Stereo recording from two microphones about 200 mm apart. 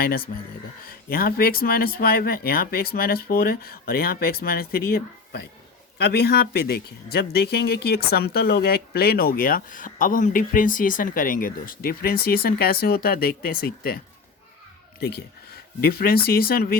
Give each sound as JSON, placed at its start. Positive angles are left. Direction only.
{"t": 0.0, "sound": "speech", "side_deg": 50}
{"t": 15.8, "sound": "speech", "side_deg": 50}